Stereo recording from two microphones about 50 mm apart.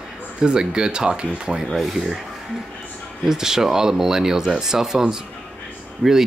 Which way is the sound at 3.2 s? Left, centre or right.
Centre.